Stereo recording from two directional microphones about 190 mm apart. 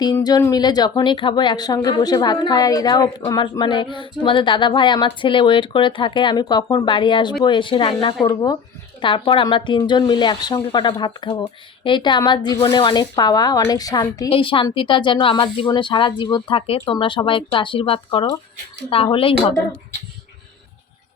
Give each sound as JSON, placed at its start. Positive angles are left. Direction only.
{"t": 0.0, "sound": "speech", "side_deg": 20}